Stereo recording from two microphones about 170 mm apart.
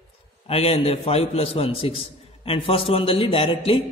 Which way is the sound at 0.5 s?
35° left (ahead or behind).